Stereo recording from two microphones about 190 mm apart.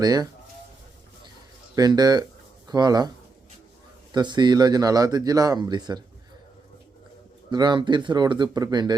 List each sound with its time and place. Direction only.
0.0 s speech: 20° right (ahead or behind)
1.7 s speech: 20° right (ahead or behind)
4.1 s speech: 25° right (ahead or behind)
7.5 s speech: 25° right (ahead or behind)